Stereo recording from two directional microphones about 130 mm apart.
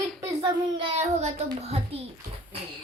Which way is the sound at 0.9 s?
55° right (ahead or behind).